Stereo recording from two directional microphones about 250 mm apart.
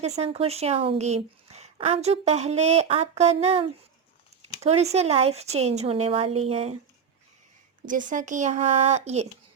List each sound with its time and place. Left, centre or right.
0.0 s speech: right
7.9 s speech: right